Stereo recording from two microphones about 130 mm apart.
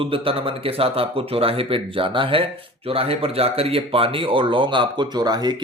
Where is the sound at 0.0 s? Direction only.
45° right (ahead or behind).